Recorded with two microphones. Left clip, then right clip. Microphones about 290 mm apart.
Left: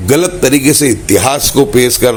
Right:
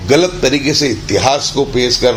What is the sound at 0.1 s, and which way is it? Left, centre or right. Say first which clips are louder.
A man's voice: left 1 dB; left.